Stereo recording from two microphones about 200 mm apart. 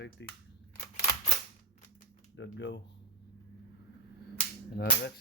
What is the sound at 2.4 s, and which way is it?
Speech, 60° left (ahead or behind).